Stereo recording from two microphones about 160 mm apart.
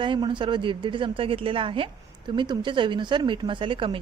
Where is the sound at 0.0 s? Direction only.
30° right (ahead or behind).